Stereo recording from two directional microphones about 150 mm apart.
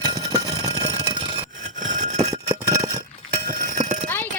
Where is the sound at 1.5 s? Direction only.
55° right (ahead or behind).